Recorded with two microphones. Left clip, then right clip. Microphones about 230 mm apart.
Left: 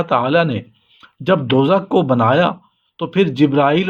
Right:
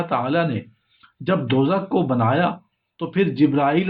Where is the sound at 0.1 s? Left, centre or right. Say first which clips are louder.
Left 7 dB; left.